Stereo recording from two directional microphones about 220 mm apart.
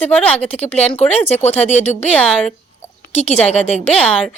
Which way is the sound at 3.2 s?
30° left (ahead or behind).